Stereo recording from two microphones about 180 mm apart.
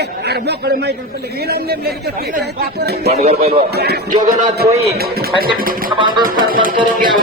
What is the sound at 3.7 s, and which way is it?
Music, 60° right (ahead or behind).